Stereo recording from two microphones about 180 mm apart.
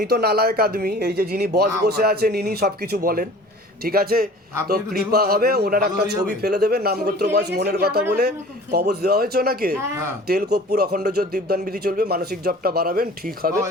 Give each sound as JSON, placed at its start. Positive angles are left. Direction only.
{"t": 0.1, "sound": "speech", "side_deg": -60}